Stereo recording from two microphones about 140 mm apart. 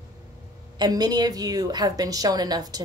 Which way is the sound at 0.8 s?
30° right (ahead or behind).